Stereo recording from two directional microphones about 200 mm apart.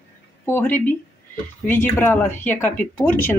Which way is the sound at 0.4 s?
10° left (ahead or behind).